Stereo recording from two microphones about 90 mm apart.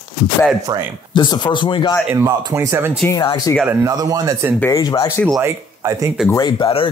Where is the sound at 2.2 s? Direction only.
25° right (ahead or behind).